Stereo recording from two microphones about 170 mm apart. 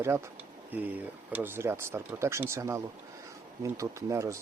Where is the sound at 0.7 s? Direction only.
10° right (ahead or behind).